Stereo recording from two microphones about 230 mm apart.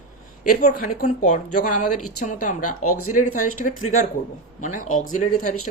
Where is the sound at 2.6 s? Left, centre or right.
Left.